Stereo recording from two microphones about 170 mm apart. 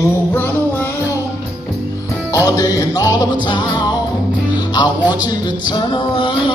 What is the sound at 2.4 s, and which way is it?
Music, 20° left (ahead or behind).